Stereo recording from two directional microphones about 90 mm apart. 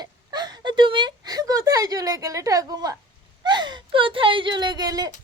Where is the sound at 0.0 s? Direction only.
50° right (ahead or behind).